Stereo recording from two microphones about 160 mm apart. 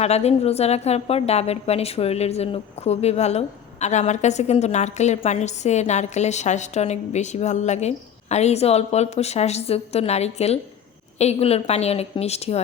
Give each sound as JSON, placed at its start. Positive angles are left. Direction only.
{"t": 0.0, "sound": "a woman's voice", "side_deg": 40}